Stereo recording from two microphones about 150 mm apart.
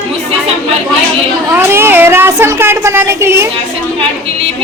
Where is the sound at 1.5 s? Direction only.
15° right (ahead or behind).